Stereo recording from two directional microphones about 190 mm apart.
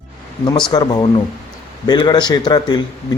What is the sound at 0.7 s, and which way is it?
A man's voice, 20° left (ahead or behind).